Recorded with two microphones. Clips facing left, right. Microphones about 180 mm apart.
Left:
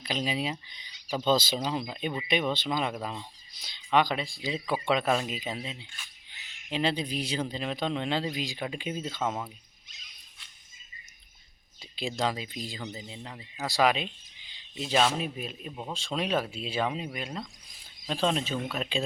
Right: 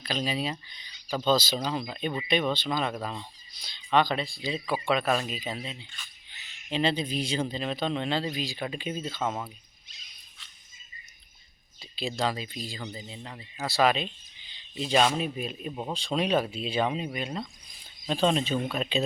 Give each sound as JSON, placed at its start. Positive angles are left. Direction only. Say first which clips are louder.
{"t": 0.0, "sound": "speech", "louder": "right 1 dB", "side_deg": 20}
{"t": 9.2, "sound": "speech", "louder": "even", "side_deg": 0}
{"t": 11.8, "sound": "speech", "louder": "right 1 dB", "side_deg": 15}